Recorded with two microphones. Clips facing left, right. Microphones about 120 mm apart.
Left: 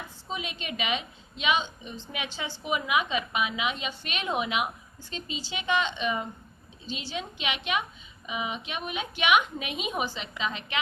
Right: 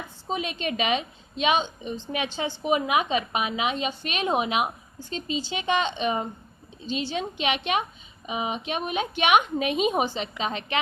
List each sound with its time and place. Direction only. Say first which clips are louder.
0.3 s a woman's voice: right 7 dB; 40° right (ahead or behind)